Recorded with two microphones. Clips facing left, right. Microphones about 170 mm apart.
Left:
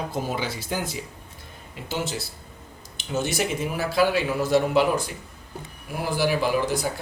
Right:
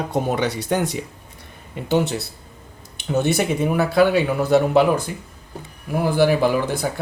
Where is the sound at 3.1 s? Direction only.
60° right (ahead or behind).